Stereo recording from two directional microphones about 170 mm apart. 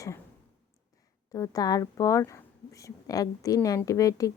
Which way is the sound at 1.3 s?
20° left (ahead or behind).